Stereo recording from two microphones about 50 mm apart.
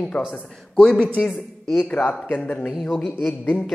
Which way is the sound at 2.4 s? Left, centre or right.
Left.